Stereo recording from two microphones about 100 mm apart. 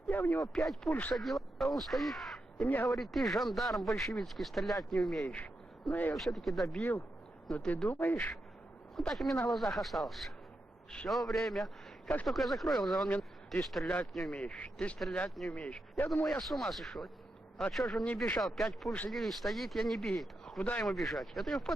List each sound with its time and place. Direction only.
0.1 s speech: 20° left (ahead or behind)
0.5 s speech: centre (ahead or behind)
0.9 s a man's voice: 15° left (ahead or behind)
1.1 s speech: centre (ahead or behind)
2.6 s a man's voice: 15° left (ahead or behind)
2.9 s speech: centre (ahead or behind)
5.9 s a man's voice: 15° left (ahead or behind)
6.1 s a man's voice: centre (ahead or behind); by 8.4 s 15° left (ahead or behind)
9.0 s speech: centre (ahead or behind)
13.1 s speech: 15° left (ahead or behind)
13.6 s a man's voice: centre (ahead or behind)
16.2 s speech: centre (ahead or behind)